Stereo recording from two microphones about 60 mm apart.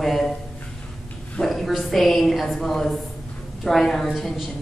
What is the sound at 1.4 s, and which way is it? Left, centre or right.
A woman's voice, centre.